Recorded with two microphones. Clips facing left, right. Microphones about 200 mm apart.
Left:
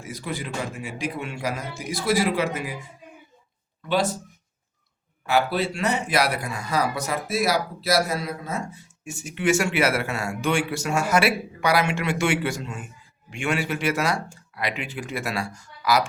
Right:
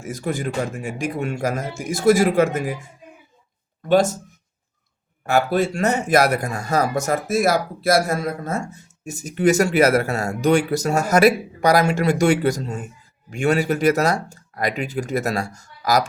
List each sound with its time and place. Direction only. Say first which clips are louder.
0.0 s a man's voice: right 7 dB; 45° right (ahead or behind)
3.8 s a man's voice: right 7 dB; 45° right (ahead or behind)
5.2 s speech: right 4 dB; 45° right (ahead or behind)